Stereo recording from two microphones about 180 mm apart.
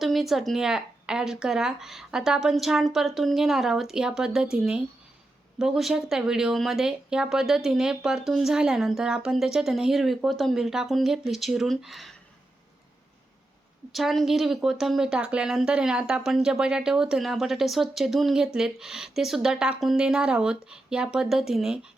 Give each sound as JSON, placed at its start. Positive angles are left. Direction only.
{"t": 0.0, "sound": "a woman's voice", "side_deg": 0}
{"t": 13.9, "sound": "a woman's voice", "side_deg": 0}